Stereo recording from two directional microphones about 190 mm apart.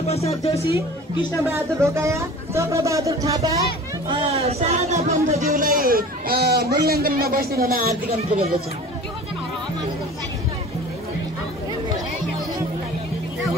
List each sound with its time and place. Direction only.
0.0 s speech: 35° left (ahead or behind)
1.5 s speech: 15° right (ahead or behind)
4.1 s speech: 30° right (ahead or behind)
5.5 s a man's voice: 50° right (ahead or behind)
8.2 s speech: 30° right (ahead or behind)